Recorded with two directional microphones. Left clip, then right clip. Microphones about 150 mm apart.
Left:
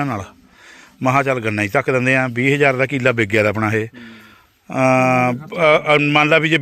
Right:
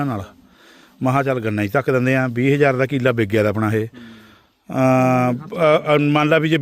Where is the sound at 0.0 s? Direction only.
35° right (ahead or behind).